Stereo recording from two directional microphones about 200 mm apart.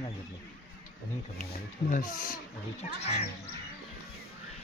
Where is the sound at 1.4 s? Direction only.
45° left (ahead or behind).